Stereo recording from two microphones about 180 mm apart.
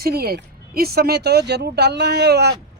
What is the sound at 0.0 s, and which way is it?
Speech, 60° right (ahead or behind).